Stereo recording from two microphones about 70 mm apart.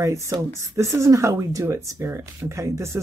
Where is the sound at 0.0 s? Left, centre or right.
Right.